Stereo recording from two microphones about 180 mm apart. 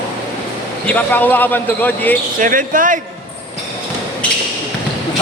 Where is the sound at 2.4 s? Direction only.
50° right (ahead or behind).